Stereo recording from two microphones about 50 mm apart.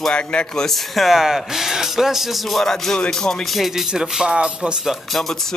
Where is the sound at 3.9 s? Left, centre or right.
Centre.